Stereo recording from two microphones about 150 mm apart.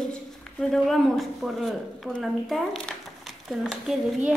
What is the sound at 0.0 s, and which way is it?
Speech, 5° left (ahead or behind).